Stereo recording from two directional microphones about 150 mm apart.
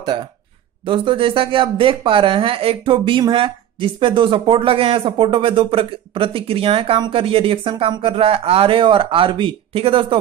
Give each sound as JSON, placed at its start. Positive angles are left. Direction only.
{"t": 0.0, "sound": "speech", "side_deg": -30}